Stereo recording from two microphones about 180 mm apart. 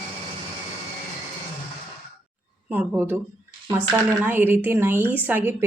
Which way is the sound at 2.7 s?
10° right (ahead or behind).